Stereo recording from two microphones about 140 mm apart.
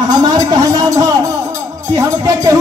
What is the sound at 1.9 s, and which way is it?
Music, 25° right (ahead or behind).